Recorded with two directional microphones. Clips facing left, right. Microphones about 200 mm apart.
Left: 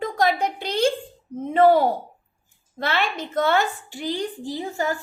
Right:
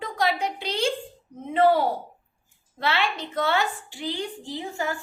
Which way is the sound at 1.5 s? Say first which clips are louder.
Left 4 dB; 45° left (ahead or behind).